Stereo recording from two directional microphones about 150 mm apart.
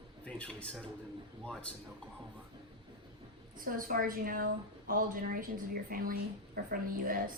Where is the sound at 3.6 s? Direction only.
70° right (ahead or behind).